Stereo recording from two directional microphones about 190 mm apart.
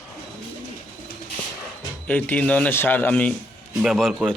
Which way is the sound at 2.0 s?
10° left (ahead or behind).